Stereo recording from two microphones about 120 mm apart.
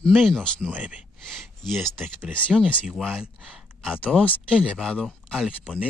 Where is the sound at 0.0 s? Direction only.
5° left (ahead or behind).